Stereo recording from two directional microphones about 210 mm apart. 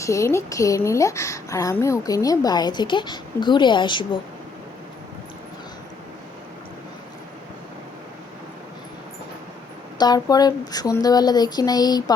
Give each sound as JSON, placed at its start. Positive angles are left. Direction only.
{"t": 0.0, "sound": "a woman's voice", "side_deg": 15}
{"t": 10.0, "sound": "speech", "side_deg": 20}